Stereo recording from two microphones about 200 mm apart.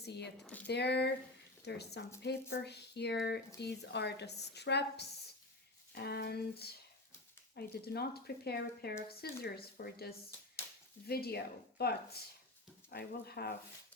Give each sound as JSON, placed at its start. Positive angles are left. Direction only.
{"t": 0.0, "sound": "speech", "side_deg": 55}